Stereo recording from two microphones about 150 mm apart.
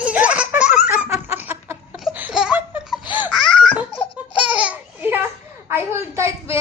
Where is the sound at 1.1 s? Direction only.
15° right (ahead or behind).